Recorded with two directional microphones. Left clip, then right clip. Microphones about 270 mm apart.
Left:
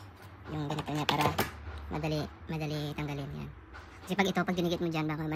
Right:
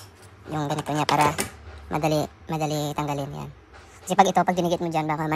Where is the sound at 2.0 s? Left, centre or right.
Centre.